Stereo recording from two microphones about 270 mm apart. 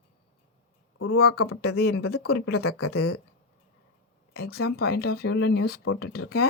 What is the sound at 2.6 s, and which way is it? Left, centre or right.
Speech, left.